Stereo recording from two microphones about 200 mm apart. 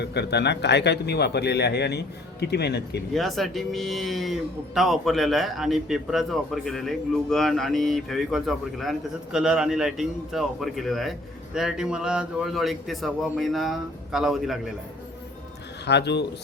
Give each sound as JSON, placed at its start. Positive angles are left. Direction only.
{"t": 0.0, "sound": "speech", "side_deg": 55}
{"t": 3.2, "sound": "speech", "side_deg": 0}
{"t": 15.9, "sound": "speech", "side_deg": 60}